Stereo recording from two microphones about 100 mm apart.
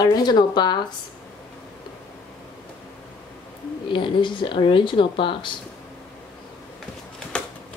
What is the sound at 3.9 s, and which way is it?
Speech, 55° left (ahead or behind).